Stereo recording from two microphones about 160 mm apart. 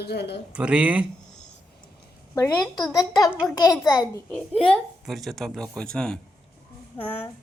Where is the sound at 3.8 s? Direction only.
25° left (ahead or behind).